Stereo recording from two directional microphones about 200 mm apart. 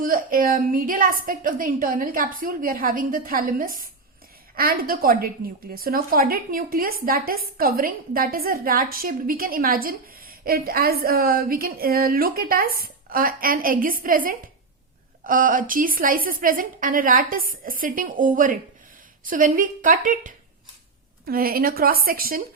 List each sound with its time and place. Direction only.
0.0 s a woman's voice: 45° right (ahead or behind)